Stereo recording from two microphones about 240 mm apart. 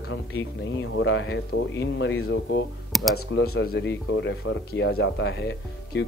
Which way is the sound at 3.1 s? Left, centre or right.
Left.